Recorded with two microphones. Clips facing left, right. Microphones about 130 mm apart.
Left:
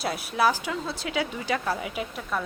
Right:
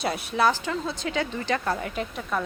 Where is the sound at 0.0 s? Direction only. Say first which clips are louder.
Right 1 dB; centre (ahead or behind).